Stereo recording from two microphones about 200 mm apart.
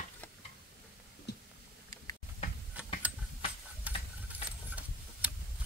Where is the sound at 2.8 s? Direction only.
5° right (ahead or behind).